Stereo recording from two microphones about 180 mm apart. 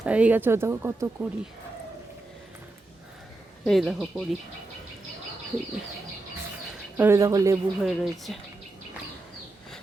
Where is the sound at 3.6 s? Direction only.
Centre (ahead or behind).